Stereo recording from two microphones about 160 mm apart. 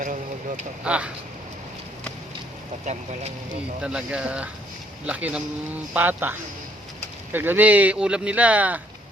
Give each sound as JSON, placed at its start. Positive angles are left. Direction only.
{"t": 0.0, "sound": "vehicle", "side_deg": -55}
{"t": 0.9, "sound": "speech", "side_deg": -5}
{"t": 2.8, "sound": "speech", "side_deg": -45}
{"t": 3.8, "sound": "speech", "side_deg": -5}
{"t": 7.3, "sound": "speech", "side_deg": -10}